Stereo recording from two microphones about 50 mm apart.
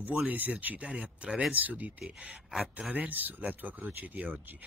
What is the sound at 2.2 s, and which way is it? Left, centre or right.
Speech, centre.